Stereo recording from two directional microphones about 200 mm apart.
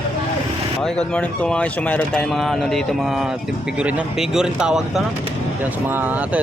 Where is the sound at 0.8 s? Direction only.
5° left (ahead or behind).